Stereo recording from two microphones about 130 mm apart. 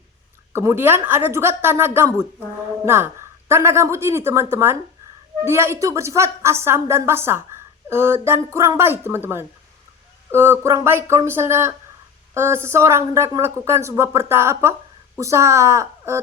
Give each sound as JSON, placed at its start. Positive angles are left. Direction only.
{"t": 0.5, "sound": "a woman's voice", "side_deg": -20}